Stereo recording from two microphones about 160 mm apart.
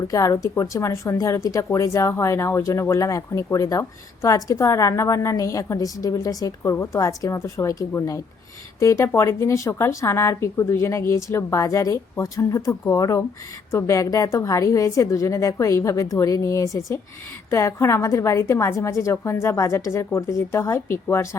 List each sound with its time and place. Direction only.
0.1 s a woman's voice: 20° left (ahead or behind)